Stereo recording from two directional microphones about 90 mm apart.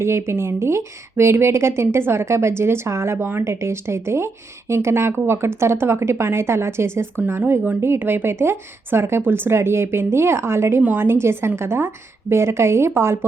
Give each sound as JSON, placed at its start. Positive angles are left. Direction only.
{"t": 0.0, "sound": "speech", "side_deg": -30}